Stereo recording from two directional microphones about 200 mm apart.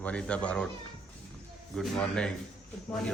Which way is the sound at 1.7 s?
5° left (ahead or behind).